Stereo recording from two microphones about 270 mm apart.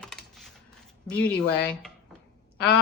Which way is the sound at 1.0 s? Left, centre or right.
Centre.